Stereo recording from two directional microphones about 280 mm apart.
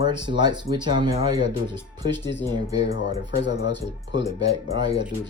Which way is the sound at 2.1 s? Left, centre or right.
Left.